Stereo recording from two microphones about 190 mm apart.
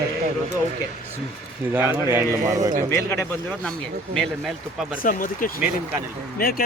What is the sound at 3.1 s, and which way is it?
Speech, 10° left (ahead or behind).